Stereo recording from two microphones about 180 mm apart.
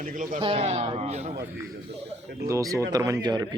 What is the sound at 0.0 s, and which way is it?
Speech, 50° right (ahead or behind).